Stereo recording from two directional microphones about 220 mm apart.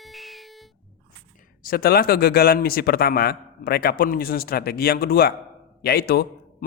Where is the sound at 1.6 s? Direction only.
45° left (ahead or behind).